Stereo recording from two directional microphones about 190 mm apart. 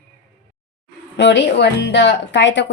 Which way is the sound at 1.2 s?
65° left (ahead or behind).